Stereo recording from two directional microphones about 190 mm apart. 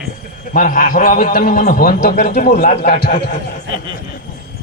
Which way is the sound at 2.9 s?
50° left (ahead or behind).